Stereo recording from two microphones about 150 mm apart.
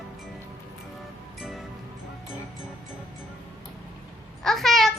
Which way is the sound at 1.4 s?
Centre (ahead or behind).